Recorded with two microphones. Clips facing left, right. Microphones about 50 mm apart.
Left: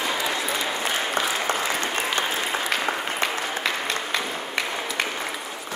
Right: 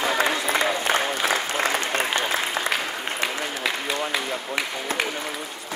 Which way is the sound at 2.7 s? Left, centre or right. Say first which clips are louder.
Left 2 dB; centre.